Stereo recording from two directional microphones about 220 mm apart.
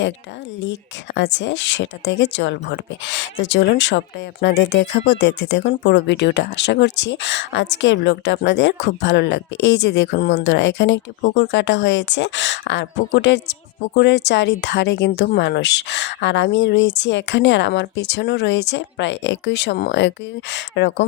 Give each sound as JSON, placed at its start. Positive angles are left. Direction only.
{"t": 0.6, "sound": "speech", "side_deg": 55}